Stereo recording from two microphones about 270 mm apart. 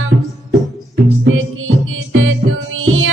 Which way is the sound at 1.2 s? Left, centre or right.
Right.